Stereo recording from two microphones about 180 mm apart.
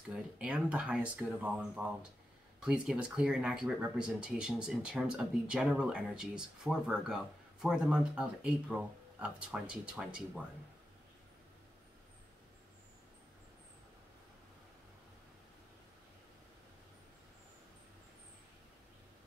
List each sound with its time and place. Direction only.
0.1 s speech: 5° right (ahead or behind)